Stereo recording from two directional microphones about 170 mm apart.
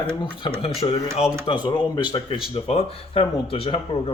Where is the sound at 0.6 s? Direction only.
35° left (ahead or behind).